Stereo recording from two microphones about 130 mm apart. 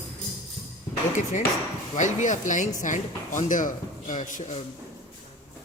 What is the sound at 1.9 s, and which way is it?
Speech, 70° left (ahead or behind).